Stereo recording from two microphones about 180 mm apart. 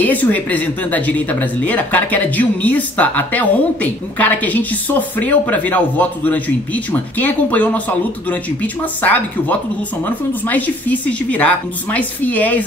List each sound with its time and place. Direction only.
0.0 s speech: 10° left (ahead or behind)
9.0 s speech: 10° left (ahead or behind)